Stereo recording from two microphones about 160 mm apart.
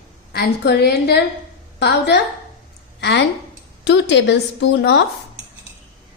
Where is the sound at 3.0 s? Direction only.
90° left.